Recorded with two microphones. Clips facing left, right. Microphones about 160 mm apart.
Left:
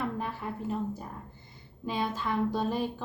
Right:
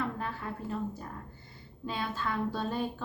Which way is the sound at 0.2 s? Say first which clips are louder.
Left 2 dB; 15° left (ahead or behind).